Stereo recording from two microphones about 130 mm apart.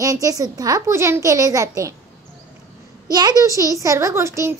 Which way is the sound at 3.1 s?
30° right (ahead or behind).